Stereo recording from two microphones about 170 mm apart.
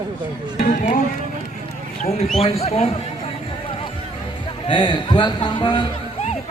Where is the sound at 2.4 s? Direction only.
35° left (ahead or behind).